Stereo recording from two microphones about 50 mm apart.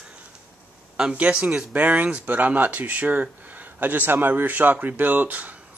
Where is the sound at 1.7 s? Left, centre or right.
Right.